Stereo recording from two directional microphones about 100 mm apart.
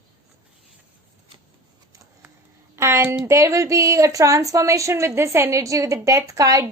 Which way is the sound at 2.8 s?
25° right (ahead or behind).